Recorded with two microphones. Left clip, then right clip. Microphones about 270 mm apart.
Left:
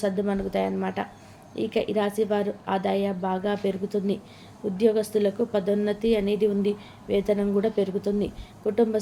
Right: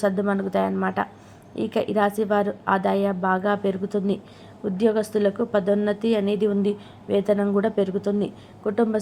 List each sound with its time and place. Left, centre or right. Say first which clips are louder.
0.0 s a woman's voice: right 3 dB; centre